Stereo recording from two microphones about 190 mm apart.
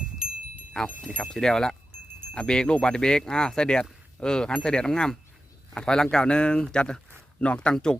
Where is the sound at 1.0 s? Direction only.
Centre (ahead or behind).